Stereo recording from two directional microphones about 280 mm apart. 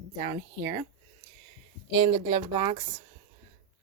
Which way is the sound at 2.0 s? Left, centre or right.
Centre.